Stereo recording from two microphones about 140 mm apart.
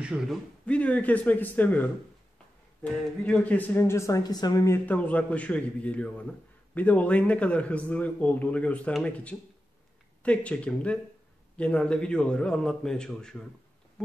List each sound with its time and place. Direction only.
0.0 s a man's voice: 5° right (ahead or behind)
0.7 s a man's voice: 10° left (ahead or behind); by 4.7 s 25° left (ahead or behind)
4.8 s a man's voice: 10° left (ahead or behind)
14.0 s a sound: 5° left (ahead or behind)